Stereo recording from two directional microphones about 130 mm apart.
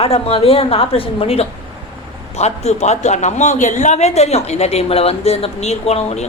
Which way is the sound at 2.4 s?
60° left (ahead or behind).